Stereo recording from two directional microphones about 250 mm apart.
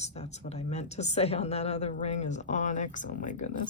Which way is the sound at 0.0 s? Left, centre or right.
Left.